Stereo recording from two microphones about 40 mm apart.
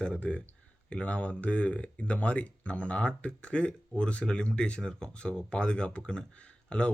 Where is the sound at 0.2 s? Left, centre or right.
Left.